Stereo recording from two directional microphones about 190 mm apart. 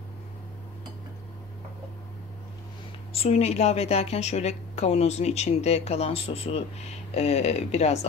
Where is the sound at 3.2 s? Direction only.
35° left (ahead or behind).